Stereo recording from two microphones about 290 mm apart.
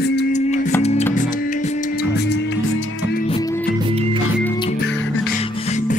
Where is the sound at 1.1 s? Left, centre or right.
Left.